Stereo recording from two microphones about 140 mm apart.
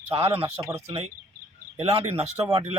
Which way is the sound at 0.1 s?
45° right (ahead or behind).